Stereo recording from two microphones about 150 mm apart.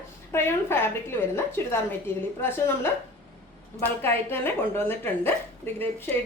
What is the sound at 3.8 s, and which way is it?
Speech, 15° left (ahead or behind).